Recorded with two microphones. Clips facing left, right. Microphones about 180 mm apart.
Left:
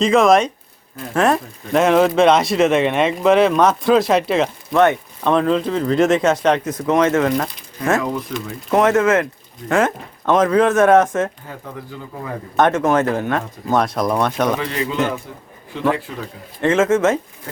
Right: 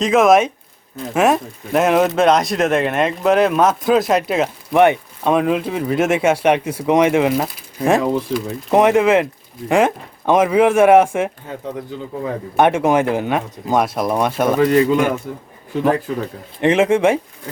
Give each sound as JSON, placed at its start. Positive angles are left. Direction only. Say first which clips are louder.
{"t": 0.0, "sound": "a man's voice", "louder": "right 1 dB", "side_deg": 0}
{"t": 4.7, "sound": "speech", "louder": "right 2 dB", "side_deg": -15}
{"t": 8.3, "sound": "speech", "louder": "right 5 dB", "side_deg": -25}
{"t": 8.7, "sound": "speech", "louder": "right 2 dB", "side_deg": -15}
{"t": 12.5, "sound": "speech", "louder": "right 1 dB", "side_deg": -15}
{"t": 14.6, "sound": "a man's voice", "louder": "right 8 dB", "side_deg": -45}
{"t": 16.6, "sound": "speech", "louder": "right 1 dB", "side_deg": -15}